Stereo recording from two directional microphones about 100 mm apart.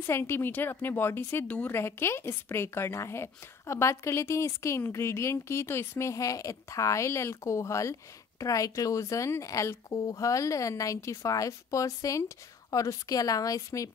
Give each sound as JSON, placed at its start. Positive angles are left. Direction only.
{"t": 0.0, "sound": "a woman's voice", "side_deg": 25}